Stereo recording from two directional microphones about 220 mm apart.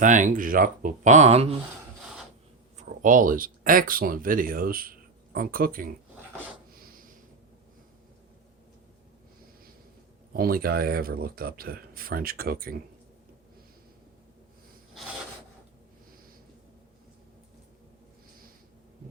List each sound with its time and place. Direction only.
0.0 s speech: 35° right (ahead or behind)
2.7 s speech: 35° right (ahead or behind)
6.7 s a sound: 40° right (ahead or behind)
10.3 s speech: 40° right (ahead or behind)